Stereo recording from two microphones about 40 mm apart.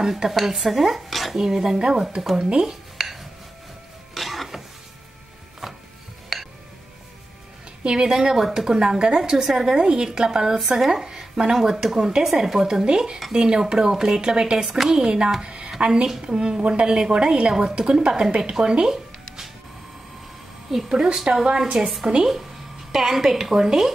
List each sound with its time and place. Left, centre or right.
0.0 s dishes: centre
1.3 s a woman's voice: centre
2.5 s a sound: centre
4.1 s music: centre
5.6 s music: centre
6.3 s a sound: centre
7.8 s a woman's voice: centre
14.6 s speech: centre
15.4 s a sound: right
15.8 s a woman's voice: right
20.7 s speech: centre